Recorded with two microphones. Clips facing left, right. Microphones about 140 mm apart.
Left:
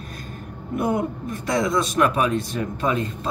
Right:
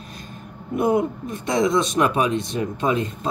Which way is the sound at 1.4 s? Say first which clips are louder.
Right 2 dB; 20° right (ahead or behind).